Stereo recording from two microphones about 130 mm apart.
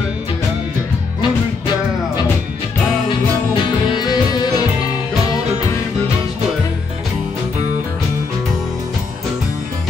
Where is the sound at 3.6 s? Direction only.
35° left (ahead or behind).